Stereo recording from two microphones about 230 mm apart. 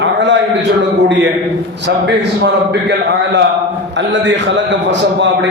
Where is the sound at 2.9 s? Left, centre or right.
Right.